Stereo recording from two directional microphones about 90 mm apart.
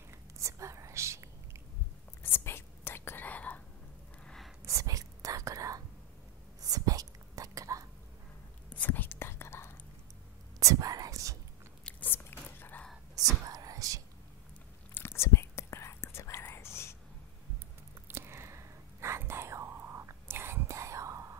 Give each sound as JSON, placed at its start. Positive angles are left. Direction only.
{"t": 0.4, "sound": "whispering", "side_deg": -35}
{"t": 2.2, "sound": "whispering", "side_deg": 25}
{"t": 4.6, "sound": "whispering", "side_deg": -40}
{"t": 8.6, "sound": "whispering", "side_deg": 15}
{"t": 10.6, "sound": "whispering", "side_deg": -40}
{"t": 11.8, "sound": "biting", "side_deg": 20}
{"t": 12.4, "sound": "a sound", "side_deg": 20}
{"t": 13.2, "sound": "whispering", "side_deg": -40}
{"t": 15.0, "sound": "whispering", "side_deg": 30}
{"t": 18.0, "sound": "whispering", "side_deg": -25}